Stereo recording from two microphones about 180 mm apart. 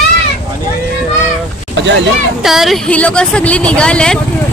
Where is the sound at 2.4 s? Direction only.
Centre (ahead or behind).